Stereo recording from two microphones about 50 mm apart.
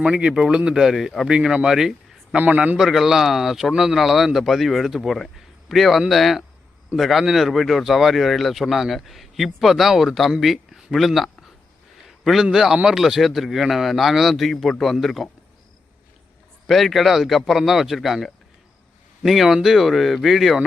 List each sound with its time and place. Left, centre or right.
0.0 s speech: centre
0.8 s speech: centre
1.3 s speech: centre
16.6 s speech: centre